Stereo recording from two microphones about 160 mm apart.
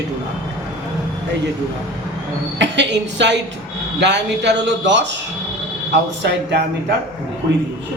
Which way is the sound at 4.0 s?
90° right.